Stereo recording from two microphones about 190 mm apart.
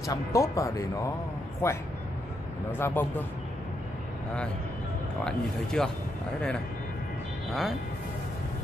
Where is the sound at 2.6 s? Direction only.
10° left (ahead or behind).